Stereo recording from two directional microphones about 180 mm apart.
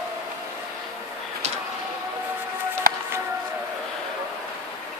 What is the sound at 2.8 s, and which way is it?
Music, 55° right (ahead or behind).